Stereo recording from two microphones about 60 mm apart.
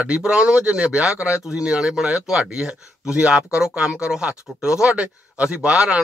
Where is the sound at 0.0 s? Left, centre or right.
Centre.